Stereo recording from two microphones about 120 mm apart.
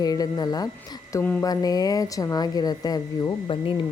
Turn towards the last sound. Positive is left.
turn(degrees=45)  # may be behind; listen again after turning